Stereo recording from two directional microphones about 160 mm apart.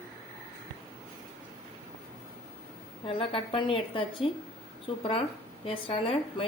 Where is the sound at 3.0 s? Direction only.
35° left (ahead or behind).